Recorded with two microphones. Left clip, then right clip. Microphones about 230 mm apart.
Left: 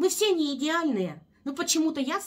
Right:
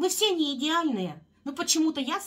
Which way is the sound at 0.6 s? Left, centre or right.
Centre.